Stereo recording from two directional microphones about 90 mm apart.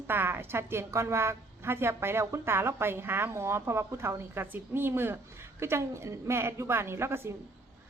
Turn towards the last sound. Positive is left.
turn(degrees=-30)  # may be behind; listen again after turning